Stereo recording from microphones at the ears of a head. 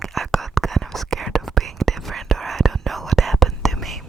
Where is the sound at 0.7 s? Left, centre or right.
Right.